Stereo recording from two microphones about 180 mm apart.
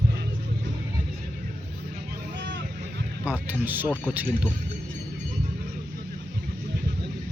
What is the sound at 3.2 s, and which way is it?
Speech, 10° right (ahead or behind).